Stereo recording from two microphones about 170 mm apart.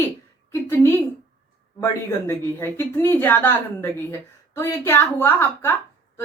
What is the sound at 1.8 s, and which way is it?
Speech, 15° left (ahead or behind).